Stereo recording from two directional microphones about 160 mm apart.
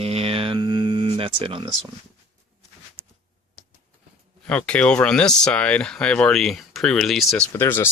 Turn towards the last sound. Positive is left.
turn(degrees=15)  # may be behind; listen again after turning